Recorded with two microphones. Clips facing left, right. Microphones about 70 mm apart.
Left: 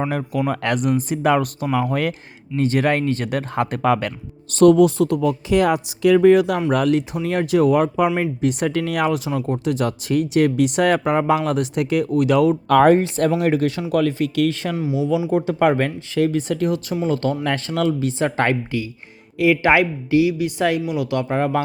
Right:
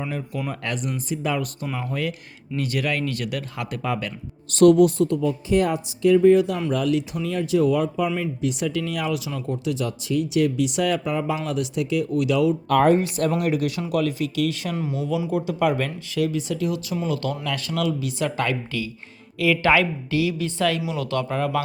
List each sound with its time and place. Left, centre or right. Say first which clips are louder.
0.4 s speech: left 8 dB; left
2.6 s speech: left 7 dB; left
3.8 s speech: left 7 dB; left
6.7 s speech: left 4 dB; left
13.0 s speech: left 4 dB; left
14.8 s speech: left 5 dB; centre
15.3 s speech: left 4 dB; left
18.7 s a woman's voice: left 4 dB; left